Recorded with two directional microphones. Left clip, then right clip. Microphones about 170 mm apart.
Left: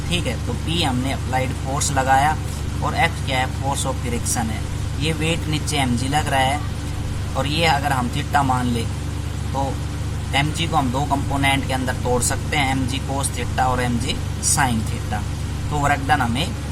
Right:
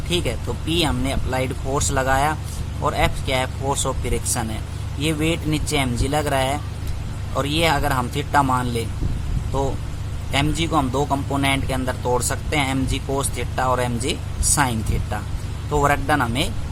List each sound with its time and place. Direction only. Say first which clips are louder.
0.1 s speech: right 1 dB; 35° right (ahead or behind)
4.9 s speech: right 1 dB; 35° right (ahead or behind)
10.3 s speech: even; 35° right (ahead or behind)
15.8 s speech: even; 35° right (ahead or behind)